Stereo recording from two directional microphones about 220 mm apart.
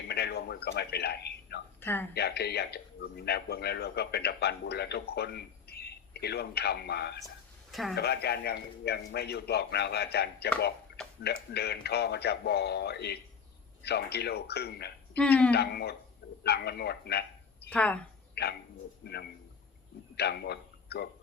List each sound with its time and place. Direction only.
0.1 s a sound: 45° left (ahead or behind)
1.8 s speech: 10° left (ahead or behind)
2.1 s a man's voice: 45° left (ahead or behind)
7.7 s speech: centre (ahead or behind)
7.9 s a man's voice: 45° left (ahead or behind)
15.1 s a woman's voice: 5° left (ahead or behind)
15.5 s a man's voice: 45° left (ahead or behind)
17.7 s a woman's voice: 5° left (ahead or behind)
18.4 s a sound: 50° left (ahead or behind)
19.0 s a man's voice: 50° left (ahead or behind)